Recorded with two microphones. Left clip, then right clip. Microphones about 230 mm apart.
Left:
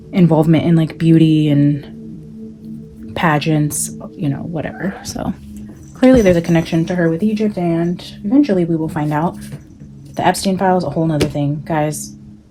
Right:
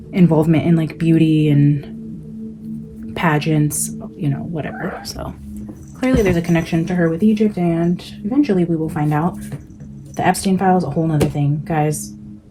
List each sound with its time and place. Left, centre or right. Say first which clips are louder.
0.1 s speech: left 2 dB; left
3.1 s speech: left 3 dB; left